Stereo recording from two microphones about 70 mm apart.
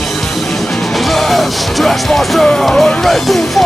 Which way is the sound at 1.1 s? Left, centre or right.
Centre.